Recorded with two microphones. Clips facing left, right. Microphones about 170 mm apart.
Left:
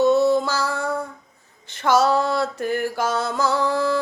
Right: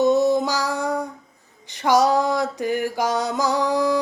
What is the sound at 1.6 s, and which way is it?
Mantra, 15° right (ahead or behind).